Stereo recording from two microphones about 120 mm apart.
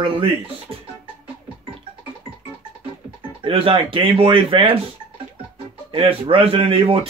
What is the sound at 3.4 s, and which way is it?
A man's voice, 50° right (ahead or behind).